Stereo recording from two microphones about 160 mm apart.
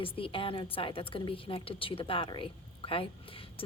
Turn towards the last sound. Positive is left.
turn(degrees=35)  # may be behind; listen again after turning